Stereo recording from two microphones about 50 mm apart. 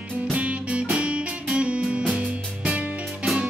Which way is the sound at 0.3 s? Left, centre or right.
Right.